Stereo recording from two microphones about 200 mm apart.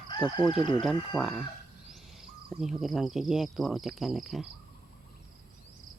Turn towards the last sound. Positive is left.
turn(degrees=0)  # may be behind; listen again after turning